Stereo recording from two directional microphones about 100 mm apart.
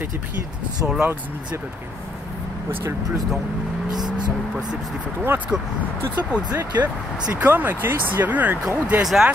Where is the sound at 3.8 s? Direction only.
45° right (ahead or behind).